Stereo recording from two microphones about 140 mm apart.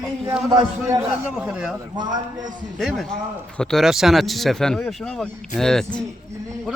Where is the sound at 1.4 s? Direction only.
5° right (ahead or behind).